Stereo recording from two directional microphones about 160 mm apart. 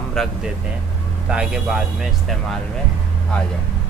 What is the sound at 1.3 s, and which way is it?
Speech, 5° right (ahead or behind).